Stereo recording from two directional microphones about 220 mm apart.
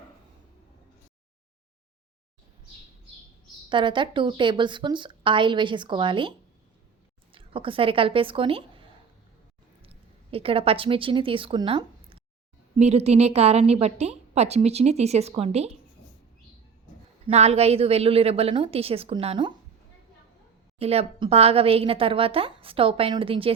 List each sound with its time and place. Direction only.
3.7 s a woman's voice: 20° right (ahead or behind)
7.3 s a woman's voice: 25° right (ahead or behind)
10.3 s a woman's voice: 25° right (ahead or behind)
17.2 s a woman's voice: 30° right (ahead or behind)
20.7 s a woman's voice: 25° right (ahead or behind)